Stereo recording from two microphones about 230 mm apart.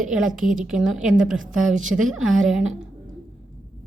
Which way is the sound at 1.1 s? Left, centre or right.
Right.